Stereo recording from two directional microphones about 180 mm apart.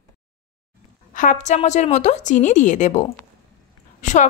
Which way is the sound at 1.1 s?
45° left (ahead or behind).